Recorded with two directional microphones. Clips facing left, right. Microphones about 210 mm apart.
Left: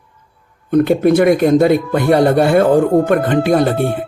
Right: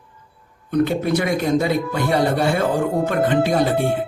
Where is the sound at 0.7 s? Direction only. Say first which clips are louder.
Left 7 dB; 55° left (ahead or behind).